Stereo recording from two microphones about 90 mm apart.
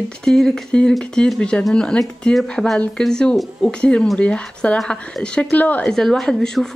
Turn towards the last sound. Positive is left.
turn(degrees=5)  # may be behind; listen again after turning